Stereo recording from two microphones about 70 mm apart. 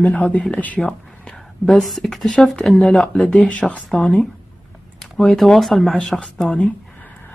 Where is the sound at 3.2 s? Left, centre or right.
Centre.